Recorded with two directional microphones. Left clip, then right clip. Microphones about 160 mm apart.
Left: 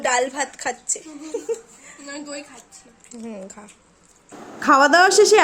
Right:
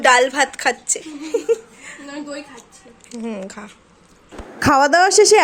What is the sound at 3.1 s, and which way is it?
Speech, 5° left (ahead or behind).